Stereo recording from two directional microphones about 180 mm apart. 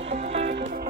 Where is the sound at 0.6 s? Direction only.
50° right (ahead or behind).